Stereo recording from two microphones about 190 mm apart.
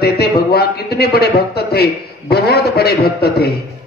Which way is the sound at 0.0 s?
55° left (ahead or behind).